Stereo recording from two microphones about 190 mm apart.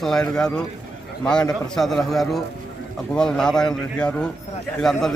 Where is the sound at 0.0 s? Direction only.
5° left (ahead or behind).